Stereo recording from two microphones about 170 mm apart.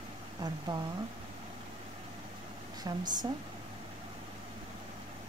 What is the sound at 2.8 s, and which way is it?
Speech, 25° right (ahead or behind).